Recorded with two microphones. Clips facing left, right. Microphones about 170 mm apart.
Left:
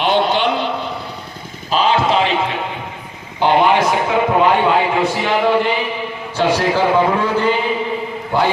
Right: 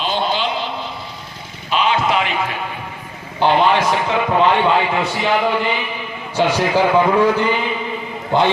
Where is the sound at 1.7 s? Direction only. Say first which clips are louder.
Left 2 dB; 35° left (ahead or behind).